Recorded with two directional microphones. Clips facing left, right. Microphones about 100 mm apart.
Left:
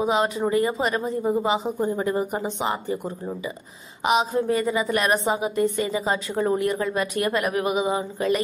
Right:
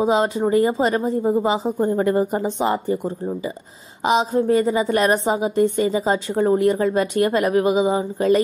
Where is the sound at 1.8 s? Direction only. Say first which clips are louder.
Right 5 dB; 50° right (ahead or behind).